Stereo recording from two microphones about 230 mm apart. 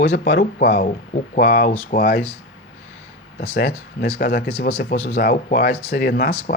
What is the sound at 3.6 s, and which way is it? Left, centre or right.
Speech, left.